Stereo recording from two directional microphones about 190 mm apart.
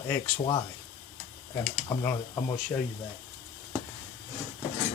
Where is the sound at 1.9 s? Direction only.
20° left (ahead or behind).